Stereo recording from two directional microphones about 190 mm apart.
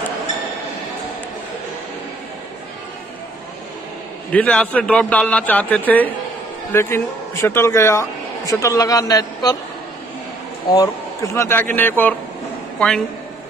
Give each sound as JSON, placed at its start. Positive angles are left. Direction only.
{"t": 4.3, "sound": "speech", "side_deg": 5}
{"t": 10.7, "sound": "speech", "side_deg": 15}